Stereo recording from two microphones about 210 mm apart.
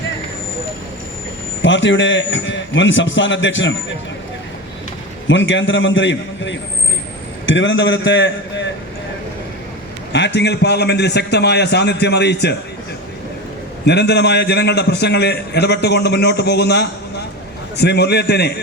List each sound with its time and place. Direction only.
1.6 s a man's voice: 60° left (ahead or behind)
5.3 s a man's voice: 60° left (ahead or behind)
10.1 s a man's voice: 55° left (ahead or behind)
13.8 s a man's voice: 55° left (ahead or behind)